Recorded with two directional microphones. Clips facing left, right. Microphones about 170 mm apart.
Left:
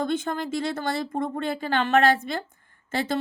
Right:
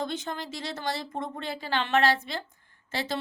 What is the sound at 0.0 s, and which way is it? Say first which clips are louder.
Speech: left 6 dB; 55° left (ahead or behind).